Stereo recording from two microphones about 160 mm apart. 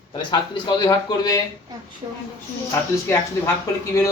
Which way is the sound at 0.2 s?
30° left (ahead or behind).